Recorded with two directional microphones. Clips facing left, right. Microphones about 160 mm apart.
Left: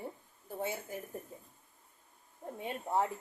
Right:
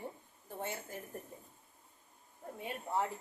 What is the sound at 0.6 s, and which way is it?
Speech, 10° left (ahead or behind).